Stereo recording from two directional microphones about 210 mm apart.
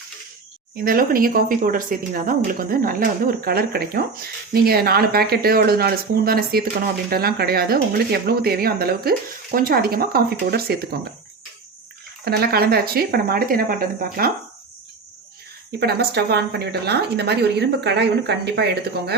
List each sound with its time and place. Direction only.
0.9 s speech: 45° right (ahead or behind)
12.2 s speech: 50° right (ahead or behind)
15.8 s speech: 50° right (ahead or behind)